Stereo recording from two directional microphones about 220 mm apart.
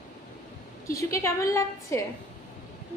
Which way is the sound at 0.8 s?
15° left (ahead or behind).